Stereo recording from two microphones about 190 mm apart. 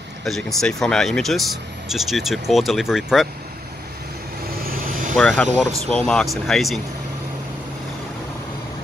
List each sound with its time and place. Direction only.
0.2 s speech: centre (ahead or behind)
4.6 s vehicle: 45° right (ahead or behind)
5.1 s speech: 5° left (ahead or behind)